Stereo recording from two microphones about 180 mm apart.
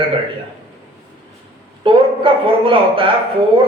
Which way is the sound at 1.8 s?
30° right (ahead or behind).